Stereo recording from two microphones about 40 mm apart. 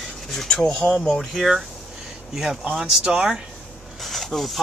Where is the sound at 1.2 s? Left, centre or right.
Centre.